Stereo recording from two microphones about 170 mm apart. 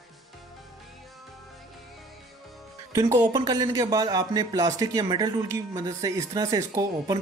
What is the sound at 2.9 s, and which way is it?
Speech, 20° right (ahead or behind).